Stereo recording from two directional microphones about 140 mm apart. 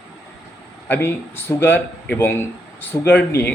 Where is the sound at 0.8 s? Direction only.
15° left (ahead or behind).